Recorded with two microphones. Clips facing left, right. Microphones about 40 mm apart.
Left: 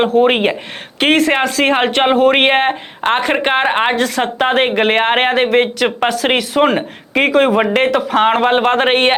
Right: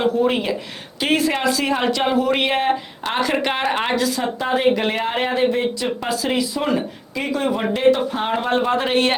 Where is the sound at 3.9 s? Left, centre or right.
Left.